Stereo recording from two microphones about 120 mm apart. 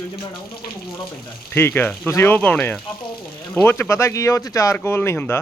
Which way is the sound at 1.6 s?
20° left (ahead or behind).